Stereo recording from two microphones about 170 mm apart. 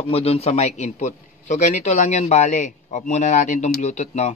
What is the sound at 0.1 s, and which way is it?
Speech, 35° left (ahead or behind).